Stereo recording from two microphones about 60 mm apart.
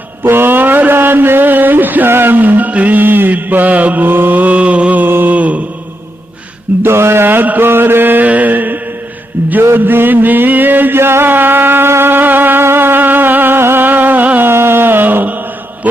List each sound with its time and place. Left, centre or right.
0.2 s mantra: right
6.8 s mantra: right
9.7 s a sound: right
14.5 s mantra: right